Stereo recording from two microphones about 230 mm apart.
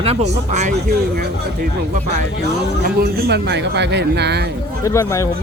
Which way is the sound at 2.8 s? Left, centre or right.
Right.